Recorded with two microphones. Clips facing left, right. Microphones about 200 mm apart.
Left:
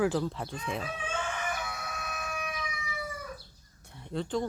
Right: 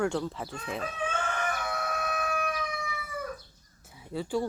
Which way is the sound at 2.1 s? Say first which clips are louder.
Right 6 dB; 60° right (ahead or behind).